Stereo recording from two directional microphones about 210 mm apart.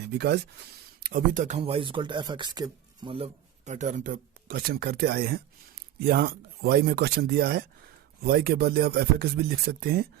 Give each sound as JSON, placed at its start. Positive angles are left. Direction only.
{"t": 0.2, "sound": "speech", "side_deg": -50}
{"t": 3.7, "sound": "speech", "side_deg": -35}